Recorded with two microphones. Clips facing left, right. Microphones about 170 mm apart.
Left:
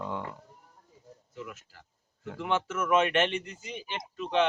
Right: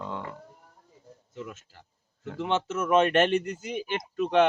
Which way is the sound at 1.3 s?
25° right (ahead or behind).